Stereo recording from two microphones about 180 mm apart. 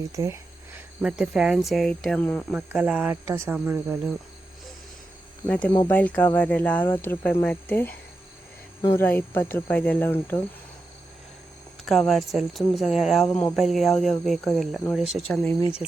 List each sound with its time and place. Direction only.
0.1 s speech: 15° right (ahead or behind)
1.0 s speech: 5° right (ahead or behind)
2.5 s speech: 5° right (ahead or behind)
5.5 s speech: 5° left (ahead or behind)
9.0 s speech: 10° left (ahead or behind)
11.9 s speech: centre (ahead or behind)